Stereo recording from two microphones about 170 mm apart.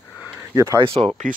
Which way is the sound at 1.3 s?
55° right (ahead or behind).